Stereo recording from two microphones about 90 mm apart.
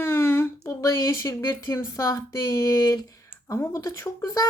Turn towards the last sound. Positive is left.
turn(degrees=40)  # may be behind; listen again after turning